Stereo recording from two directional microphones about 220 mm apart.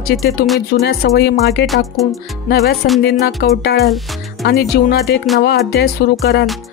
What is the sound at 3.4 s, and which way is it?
Speech, 45° left (ahead or behind).